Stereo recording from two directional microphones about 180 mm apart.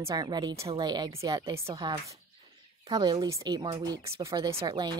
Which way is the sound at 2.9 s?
20° right (ahead or behind).